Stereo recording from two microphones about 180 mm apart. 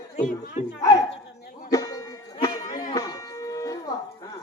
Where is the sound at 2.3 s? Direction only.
25° left (ahead or behind).